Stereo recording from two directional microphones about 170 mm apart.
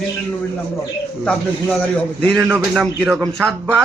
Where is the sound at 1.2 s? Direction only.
5° left (ahead or behind).